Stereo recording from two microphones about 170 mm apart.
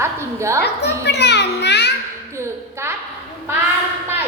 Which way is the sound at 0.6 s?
80° left.